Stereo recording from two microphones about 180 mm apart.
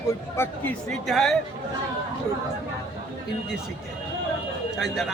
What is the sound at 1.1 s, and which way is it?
Speech, centre (ahead or behind).